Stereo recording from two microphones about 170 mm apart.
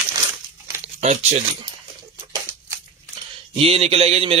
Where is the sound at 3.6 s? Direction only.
35° right (ahead or behind).